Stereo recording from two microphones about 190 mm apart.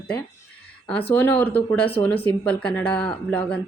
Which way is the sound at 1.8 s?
30° left (ahead or behind).